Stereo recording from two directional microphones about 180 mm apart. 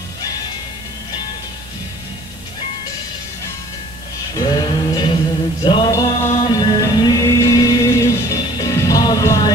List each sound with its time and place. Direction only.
4.4 s music: 25° left (ahead or behind)